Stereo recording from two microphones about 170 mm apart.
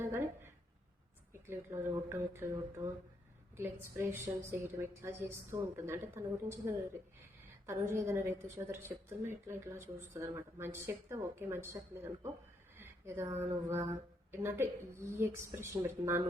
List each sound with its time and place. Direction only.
1.3 s a woman's voice: 15° right (ahead or behind)
12.7 s a sound: 15° right (ahead or behind)
13.4 s a woman's voice: 15° right (ahead or behind)